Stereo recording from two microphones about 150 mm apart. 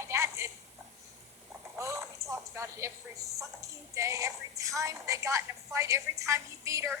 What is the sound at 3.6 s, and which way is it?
Music, 20° right (ahead or behind).